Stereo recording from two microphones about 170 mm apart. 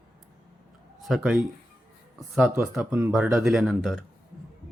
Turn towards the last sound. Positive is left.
turn(degrees=0)  # may be behind; listen again after turning